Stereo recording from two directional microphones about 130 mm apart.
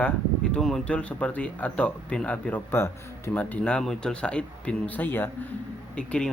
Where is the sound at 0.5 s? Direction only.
5° left (ahead or behind).